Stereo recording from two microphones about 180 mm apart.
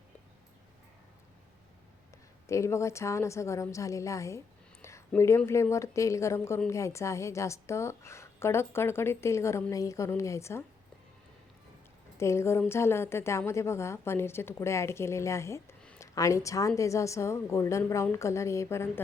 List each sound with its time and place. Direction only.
2.5 s a woman's voice: 15° left (ahead or behind)
12.1 s a woman's voice: 15° left (ahead or behind)